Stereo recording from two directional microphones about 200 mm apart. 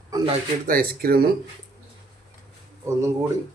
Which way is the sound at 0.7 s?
50° right (ahead or behind).